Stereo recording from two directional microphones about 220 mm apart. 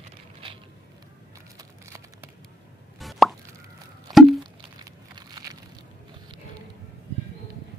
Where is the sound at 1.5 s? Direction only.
15° right (ahead or behind).